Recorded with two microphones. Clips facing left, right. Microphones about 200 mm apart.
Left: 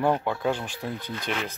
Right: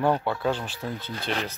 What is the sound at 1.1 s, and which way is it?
Speech, 35° right (ahead or behind).